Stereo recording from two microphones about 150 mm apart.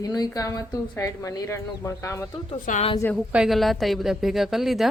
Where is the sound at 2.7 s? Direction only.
60° left (ahead or behind).